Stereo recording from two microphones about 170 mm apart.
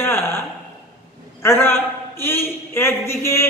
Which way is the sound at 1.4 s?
15° left (ahead or behind).